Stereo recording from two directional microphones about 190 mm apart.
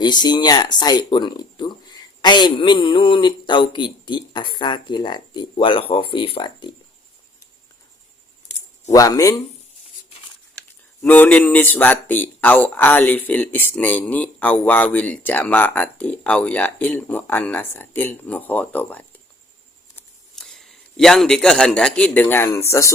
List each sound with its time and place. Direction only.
0.0 s speech: 25° left (ahead or behind)
8.9 s speech: 20° left (ahead or behind)
11.0 s a man's voice: 10° left (ahead or behind)